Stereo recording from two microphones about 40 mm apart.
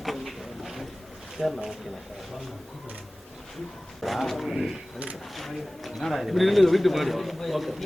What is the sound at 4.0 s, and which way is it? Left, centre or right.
Speech, centre.